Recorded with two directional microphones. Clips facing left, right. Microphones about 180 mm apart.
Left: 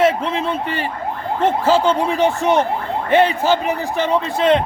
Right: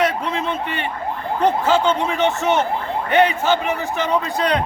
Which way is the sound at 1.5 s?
30° left (ahead or behind).